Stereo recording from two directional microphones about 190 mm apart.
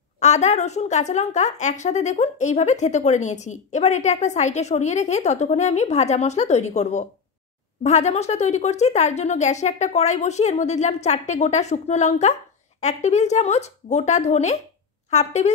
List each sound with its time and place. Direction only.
0.2 s speech: 35° left (ahead or behind)